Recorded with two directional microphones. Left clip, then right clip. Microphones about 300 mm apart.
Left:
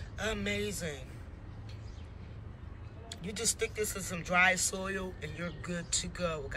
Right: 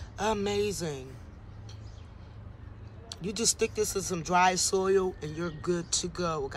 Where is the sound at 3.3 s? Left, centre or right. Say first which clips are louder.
Right 6 dB; right.